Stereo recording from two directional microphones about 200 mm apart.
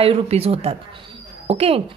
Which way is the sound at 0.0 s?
30° right (ahead or behind).